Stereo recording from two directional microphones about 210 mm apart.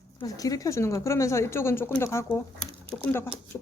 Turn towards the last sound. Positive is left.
turn(degrees=10)  # may be behind; listen again after turning